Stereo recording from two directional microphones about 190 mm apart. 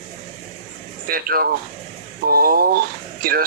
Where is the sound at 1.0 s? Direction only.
50° right (ahead or behind).